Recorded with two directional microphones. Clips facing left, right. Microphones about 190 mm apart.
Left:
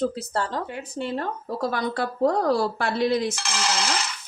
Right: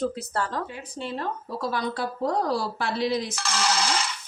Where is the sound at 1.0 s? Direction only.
50° left (ahead or behind).